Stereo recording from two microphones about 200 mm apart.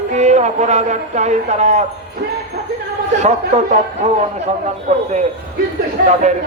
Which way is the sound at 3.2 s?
35° right (ahead or behind).